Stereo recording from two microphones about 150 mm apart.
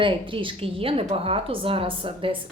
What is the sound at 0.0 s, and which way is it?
A woman's voice, 35° right (ahead or behind).